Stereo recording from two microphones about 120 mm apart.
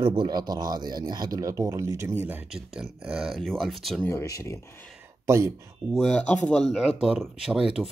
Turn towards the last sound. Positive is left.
turn(degrees=-5)  # may be behind; listen again after turning